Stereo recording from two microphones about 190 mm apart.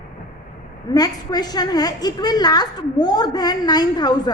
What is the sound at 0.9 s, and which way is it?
A woman's voice, 20° left (ahead or behind).